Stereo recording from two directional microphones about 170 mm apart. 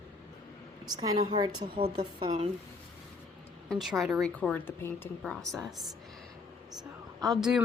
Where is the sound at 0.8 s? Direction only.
25° right (ahead or behind).